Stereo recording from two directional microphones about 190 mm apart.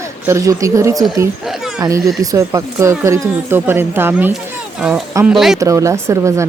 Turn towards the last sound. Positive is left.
turn(degrees=-15)  # may be behind; listen again after turning